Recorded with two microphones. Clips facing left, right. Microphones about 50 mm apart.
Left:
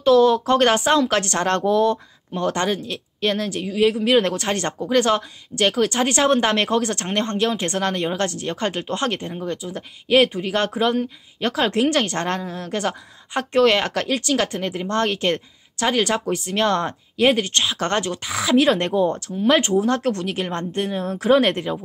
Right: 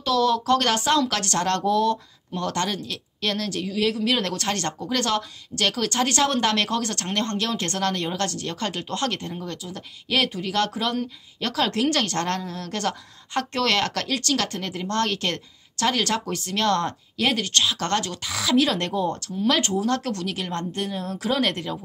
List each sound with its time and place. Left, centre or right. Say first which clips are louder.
0.0 s speech: left 7 dB; left